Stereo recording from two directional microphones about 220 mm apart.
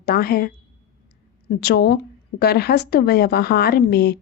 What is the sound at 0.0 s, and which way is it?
Speech, 45° left (ahead or behind).